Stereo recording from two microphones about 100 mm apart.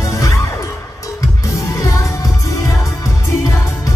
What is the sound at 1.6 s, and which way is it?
Music, 30° left (ahead or behind).